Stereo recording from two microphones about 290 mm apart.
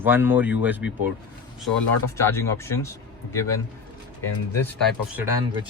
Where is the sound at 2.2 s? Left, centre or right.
Centre.